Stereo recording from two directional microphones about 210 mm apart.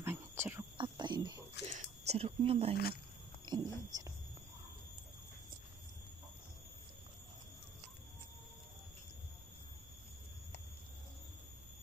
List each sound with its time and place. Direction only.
0.0 s whispering: 10° right (ahead or behind)
0.7 s a sound: 20° right (ahead or behind)
3.4 s speech: 20° right (ahead or behind)